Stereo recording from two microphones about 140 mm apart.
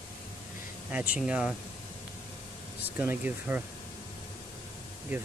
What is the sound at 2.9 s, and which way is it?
Speech, 15° right (ahead or behind).